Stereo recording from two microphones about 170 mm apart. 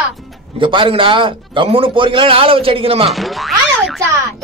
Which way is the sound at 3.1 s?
Centre (ahead or behind).